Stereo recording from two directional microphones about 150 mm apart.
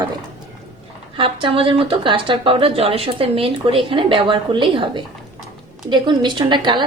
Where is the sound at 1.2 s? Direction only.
35° right (ahead or behind).